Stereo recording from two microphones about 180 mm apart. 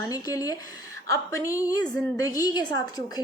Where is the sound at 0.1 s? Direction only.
20° left (ahead or behind).